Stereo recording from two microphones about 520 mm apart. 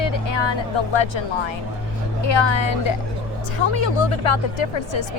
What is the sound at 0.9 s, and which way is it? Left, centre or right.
A woman's voice, left.